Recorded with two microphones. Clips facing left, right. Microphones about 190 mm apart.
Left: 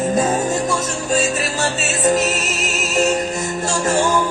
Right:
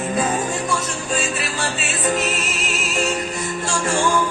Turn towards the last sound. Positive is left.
turn(degrees=40)  # may be behind; listen again after turning